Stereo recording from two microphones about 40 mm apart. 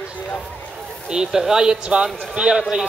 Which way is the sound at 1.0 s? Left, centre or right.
Centre.